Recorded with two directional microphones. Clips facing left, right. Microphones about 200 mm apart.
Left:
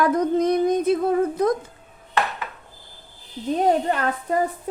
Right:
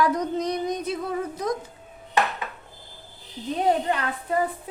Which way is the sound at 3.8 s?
45° left (ahead or behind).